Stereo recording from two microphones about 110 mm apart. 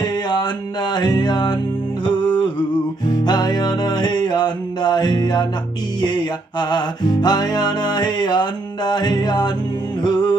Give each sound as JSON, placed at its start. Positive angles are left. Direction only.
{"t": 0.0, "sound": "mantra", "side_deg": 40}
{"t": 0.9, "sound": "music", "side_deg": 40}
{"t": 6.6, "sound": "music", "side_deg": 40}